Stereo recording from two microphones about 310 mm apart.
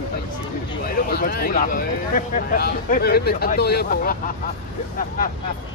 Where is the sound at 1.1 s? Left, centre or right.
Left.